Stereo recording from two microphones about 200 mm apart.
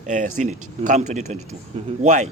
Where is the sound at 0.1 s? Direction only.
40° right (ahead or behind).